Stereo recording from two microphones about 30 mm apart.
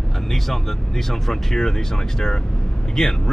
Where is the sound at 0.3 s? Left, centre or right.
Centre.